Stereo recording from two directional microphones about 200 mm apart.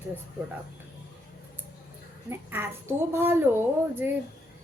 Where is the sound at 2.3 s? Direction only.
10° right (ahead or behind).